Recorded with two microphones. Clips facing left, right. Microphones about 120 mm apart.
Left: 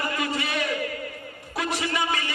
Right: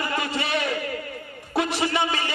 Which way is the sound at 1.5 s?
30° right (ahead or behind).